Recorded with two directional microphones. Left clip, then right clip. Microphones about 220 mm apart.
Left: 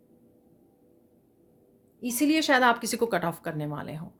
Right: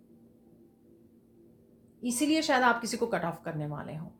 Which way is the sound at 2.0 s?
55° left (ahead or behind).